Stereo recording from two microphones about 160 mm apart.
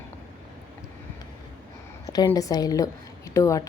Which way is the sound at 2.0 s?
25° left (ahead or behind).